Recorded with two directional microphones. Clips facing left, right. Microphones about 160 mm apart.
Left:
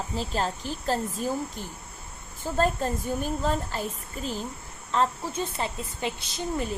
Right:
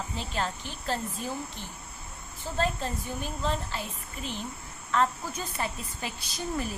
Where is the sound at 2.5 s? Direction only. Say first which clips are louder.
Left 5 dB; 45° left (ahead or behind).